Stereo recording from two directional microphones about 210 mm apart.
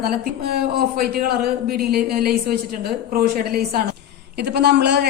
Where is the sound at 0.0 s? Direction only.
50° right (ahead or behind).